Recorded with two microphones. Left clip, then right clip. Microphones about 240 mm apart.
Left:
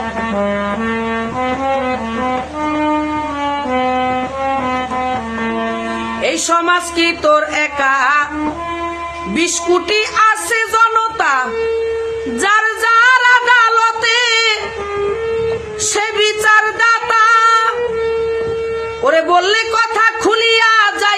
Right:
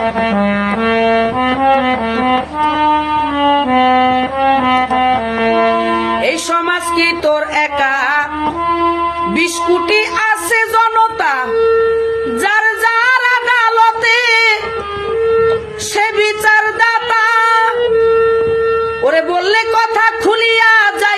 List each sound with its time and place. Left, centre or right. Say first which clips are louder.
0.3 s music: right 2 dB; right
3.4 s music: right 6 dB; right
6.2 s music: even; centre
9.4 s music: left 1 dB; centre
12.4 s music: even; centre
16.0 s music: right 2 dB; centre
19.0 s a sound: left 3 dB; centre